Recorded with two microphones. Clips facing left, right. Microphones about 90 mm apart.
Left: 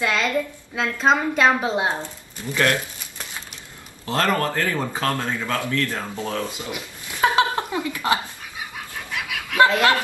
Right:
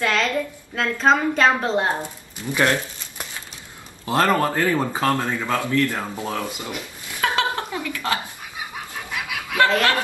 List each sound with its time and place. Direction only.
0.0 s a woman's voice: 10° left (ahead or behind)
2.5 s speech: 20° right (ahead or behind)
6.7 s a sound: 20° left (ahead or behind)
9.6 s speech: 20° left (ahead or behind)